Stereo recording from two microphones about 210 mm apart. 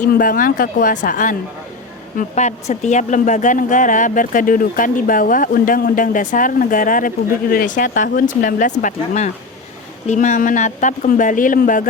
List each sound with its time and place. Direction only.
0.0 s speech: 40° left (ahead or behind)